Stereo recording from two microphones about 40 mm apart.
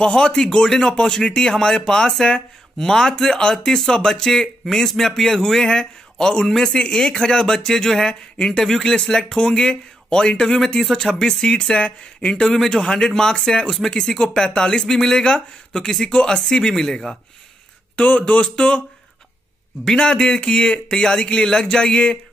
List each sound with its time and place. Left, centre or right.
0.0 s speech: centre
12.3 s speech: centre
17.9 s speech: left
19.9 s speech: centre